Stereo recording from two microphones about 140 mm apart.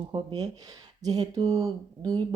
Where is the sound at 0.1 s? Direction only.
30° right (ahead or behind).